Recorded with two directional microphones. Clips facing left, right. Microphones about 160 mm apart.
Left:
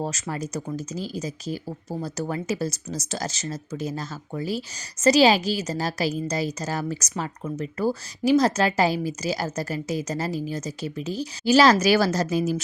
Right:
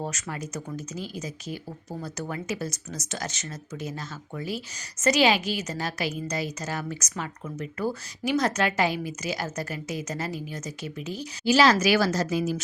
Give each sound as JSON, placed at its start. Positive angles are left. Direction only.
{"t": 0.0, "sound": "speech", "side_deg": 30}